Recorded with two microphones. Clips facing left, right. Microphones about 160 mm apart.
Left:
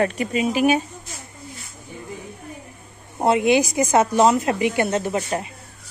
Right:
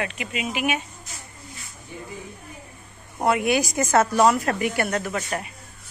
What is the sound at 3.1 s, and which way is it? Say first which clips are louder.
Speech: left 4 dB; 25° left (ahead or behind).